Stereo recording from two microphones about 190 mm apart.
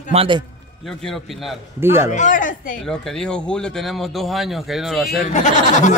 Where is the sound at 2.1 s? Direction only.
40° left (ahead or behind).